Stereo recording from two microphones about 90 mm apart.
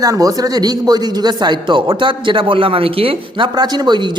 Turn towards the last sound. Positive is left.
turn(degrees=-55)  # may be behind; listen again after turning